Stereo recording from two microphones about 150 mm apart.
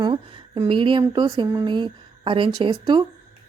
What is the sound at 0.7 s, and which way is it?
A woman's voice, 35° right (ahead or behind).